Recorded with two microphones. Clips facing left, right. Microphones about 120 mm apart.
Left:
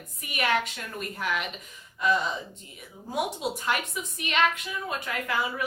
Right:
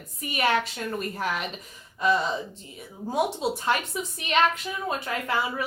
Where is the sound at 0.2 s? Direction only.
35° right (ahead or behind).